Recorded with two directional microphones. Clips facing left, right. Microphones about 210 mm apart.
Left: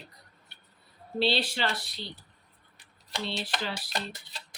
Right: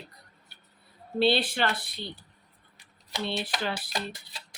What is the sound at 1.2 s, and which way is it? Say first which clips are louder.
Speech: right 4 dB; 55° right (ahead or behind).